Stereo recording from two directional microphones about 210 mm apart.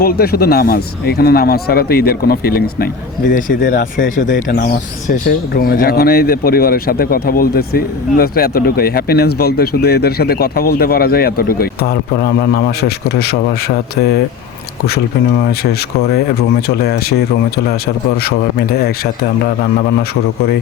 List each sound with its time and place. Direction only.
0.0 s speech: 45° left (ahead or behind)
4.0 s speech: 60° left (ahead or behind)
4.4 s speech: 45° left (ahead or behind)
16.6 s speech: 50° left (ahead or behind)
18.3 s speech: 45° left (ahead or behind)